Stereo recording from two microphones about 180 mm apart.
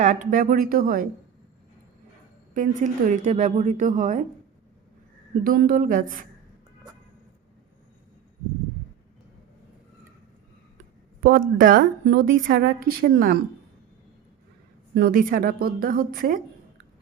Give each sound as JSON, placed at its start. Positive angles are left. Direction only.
{"t": 0.0, "sound": "a woman's voice", "side_deg": -45}
{"t": 2.6, "sound": "a woman's voice", "side_deg": -40}
{"t": 5.4, "sound": "a woman's voice", "side_deg": -55}
{"t": 11.2, "sound": "a woman's voice", "side_deg": -55}
{"t": 14.9, "sound": "a woman's voice", "side_deg": -50}